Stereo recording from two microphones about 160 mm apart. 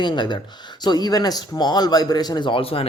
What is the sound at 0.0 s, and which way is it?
Speech, 30° left (ahead or behind).